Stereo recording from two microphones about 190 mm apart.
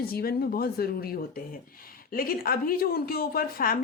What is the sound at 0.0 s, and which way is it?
Speech, 55° left (ahead or behind).